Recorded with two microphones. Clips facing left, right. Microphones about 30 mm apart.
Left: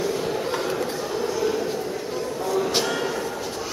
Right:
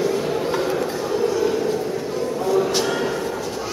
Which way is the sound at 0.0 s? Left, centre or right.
Centre.